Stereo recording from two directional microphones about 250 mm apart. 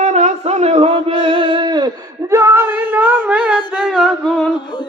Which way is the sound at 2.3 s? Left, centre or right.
Centre.